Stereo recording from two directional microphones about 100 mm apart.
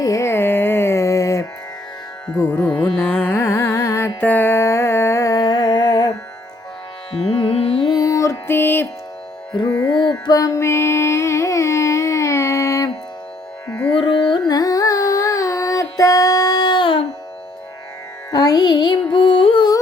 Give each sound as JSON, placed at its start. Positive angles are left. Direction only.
{"t": 0.0, "sound": "carnatic music", "side_deg": 30}
{"t": 2.5, "sound": "carnatic music", "side_deg": 15}
{"t": 4.2, "sound": "music", "side_deg": 20}
{"t": 7.3, "sound": "music", "side_deg": 75}
{"t": 7.8, "sound": "music", "side_deg": 45}
{"t": 9.8, "sound": "carnatic music", "side_deg": 50}
{"t": 13.9, "sound": "carnatic music", "side_deg": 60}
{"t": 14.4, "sound": "music", "side_deg": 40}
{"t": 18.3, "sound": "music", "side_deg": 40}